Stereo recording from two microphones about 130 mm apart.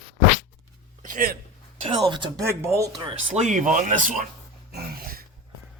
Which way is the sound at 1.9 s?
35° right (ahead or behind).